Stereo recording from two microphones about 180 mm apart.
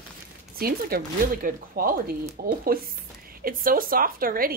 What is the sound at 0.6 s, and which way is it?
A woman's voice, 55° right (ahead or behind).